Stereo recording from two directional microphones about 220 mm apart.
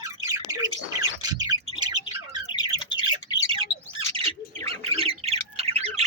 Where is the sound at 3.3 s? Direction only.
20° left (ahead or behind).